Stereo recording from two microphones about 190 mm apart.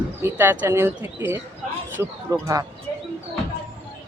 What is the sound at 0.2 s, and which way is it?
Speech, 10° right (ahead or behind).